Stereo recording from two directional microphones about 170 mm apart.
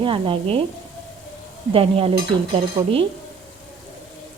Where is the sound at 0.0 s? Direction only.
30° right (ahead or behind).